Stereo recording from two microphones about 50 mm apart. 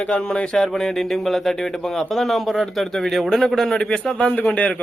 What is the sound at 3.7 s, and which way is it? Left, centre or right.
Speech, centre.